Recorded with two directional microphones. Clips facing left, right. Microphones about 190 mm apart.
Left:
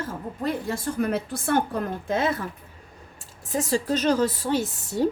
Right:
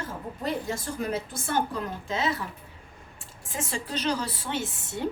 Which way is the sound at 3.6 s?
40° left (ahead or behind).